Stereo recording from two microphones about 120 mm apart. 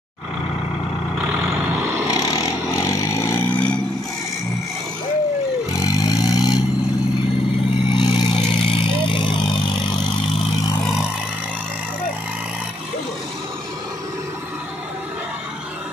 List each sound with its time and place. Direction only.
2.0 s vehicle: 25° left (ahead or behind)
5.7 s vehicle: 30° left (ahead or behind)
7.9 s vehicle: 40° left (ahead or behind)